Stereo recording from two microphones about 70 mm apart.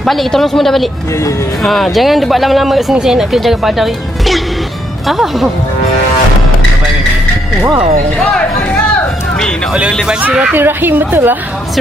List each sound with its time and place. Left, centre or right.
0.0 s speech: centre
8.2 s a sound: centre
10.5 s a woman's voice: right